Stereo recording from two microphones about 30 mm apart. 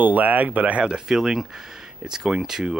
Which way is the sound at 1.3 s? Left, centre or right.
Centre.